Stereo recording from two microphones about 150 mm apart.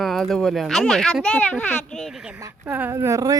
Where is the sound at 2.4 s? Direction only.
20° right (ahead or behind).